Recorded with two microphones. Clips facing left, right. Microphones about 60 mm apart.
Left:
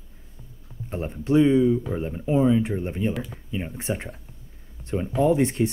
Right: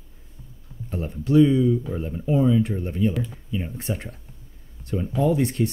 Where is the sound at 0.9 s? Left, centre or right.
Left.